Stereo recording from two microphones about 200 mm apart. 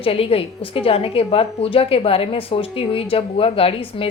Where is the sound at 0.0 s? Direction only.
30° left (ahead or behind).